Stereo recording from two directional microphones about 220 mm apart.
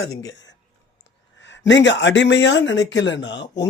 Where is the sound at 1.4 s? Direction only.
55° left (ahead or behind).